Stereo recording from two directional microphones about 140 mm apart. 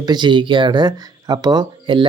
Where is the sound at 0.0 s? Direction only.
30° right (ahead or behind).